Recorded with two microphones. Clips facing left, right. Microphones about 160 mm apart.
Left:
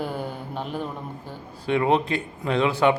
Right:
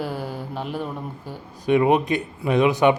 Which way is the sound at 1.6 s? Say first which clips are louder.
Right 4 dB; 15° right (ahead or behind).